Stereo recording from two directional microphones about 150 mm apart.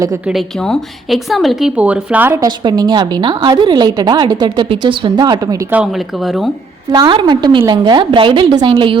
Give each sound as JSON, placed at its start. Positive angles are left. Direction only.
{"t": 0.3, "sound": "a woman's voice", "side_deg": 0}
{"t": 2.6, "sound": "a woman's voice", "side_deg": -30}
{"t": 5.7, "sound": "a woman's voice", "side_deg": -5}
{"t": 6.9, "sound": "a woman's voice", "side_deg": -30}